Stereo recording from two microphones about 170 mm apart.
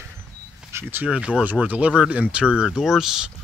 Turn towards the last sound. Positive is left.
turn(degrees=-5)  # may be behind; listen again after turning